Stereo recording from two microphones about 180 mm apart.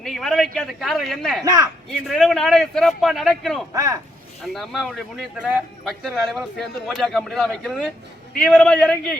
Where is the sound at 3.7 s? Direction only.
20° right (ahead or behind).